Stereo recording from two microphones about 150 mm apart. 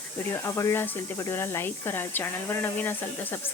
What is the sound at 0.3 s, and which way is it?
Speech, 20° left (ahead or behind).